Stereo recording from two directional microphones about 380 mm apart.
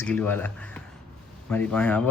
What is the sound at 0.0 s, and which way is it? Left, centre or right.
Speech, centre.